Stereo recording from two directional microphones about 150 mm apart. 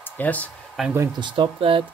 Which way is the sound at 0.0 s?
10° left (ahead or behind).